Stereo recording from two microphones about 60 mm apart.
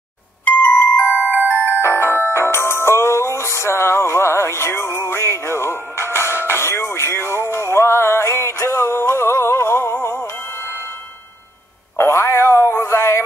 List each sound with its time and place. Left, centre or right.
0.5 s music: left
0.7 s music: left
12.0 s cat: left